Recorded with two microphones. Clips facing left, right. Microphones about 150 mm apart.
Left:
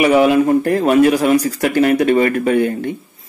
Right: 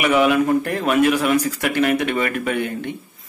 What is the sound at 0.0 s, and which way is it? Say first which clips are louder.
Speech: left 5 dB; 35° left (ahead or behind).